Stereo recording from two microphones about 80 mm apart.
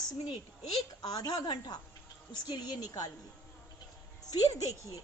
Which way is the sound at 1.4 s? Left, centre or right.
Left.